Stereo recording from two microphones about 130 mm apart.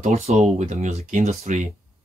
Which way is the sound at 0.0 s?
55° right (ahead or behind).